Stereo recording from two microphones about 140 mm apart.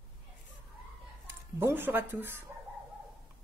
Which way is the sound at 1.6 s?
15° right (ahead or behind).